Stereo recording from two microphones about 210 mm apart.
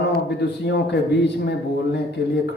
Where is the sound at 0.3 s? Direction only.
55° left (ahead or behind).